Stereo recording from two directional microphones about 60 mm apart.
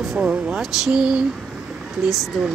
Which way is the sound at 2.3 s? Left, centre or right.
Centre.